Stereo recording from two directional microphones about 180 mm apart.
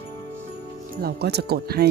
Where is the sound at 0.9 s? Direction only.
60° right (ahead or behind).